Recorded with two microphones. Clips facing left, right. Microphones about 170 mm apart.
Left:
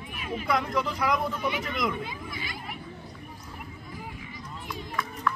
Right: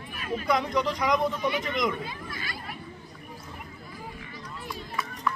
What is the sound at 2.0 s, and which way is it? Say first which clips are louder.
Children playing: even; 15° left (ahead or behind).